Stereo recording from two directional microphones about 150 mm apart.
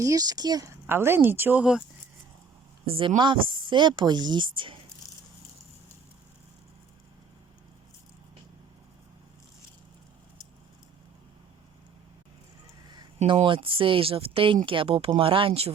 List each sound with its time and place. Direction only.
0.0 s speech: 25° right (ahead or behind); by 1.8 s 10° right (ahead or behind)
2.8 s a woman's voice: 40° right (ahead or behind)
13.1 s speech: 35° right (ahead or behind)